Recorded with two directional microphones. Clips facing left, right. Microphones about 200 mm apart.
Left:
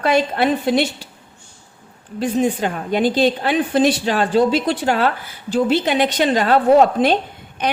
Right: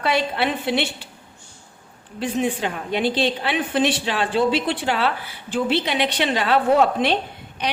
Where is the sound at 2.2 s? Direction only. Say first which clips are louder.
Left 4 dB; 45° left (ahead or behind).